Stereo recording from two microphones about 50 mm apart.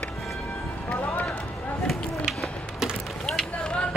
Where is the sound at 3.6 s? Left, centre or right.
Centre.